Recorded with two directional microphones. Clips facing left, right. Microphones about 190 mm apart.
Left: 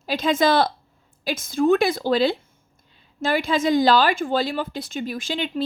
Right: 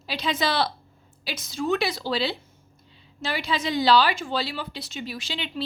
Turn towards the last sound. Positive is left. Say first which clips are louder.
# left 7 dB
turn(degrees=50)  # may be behind; listen again after turning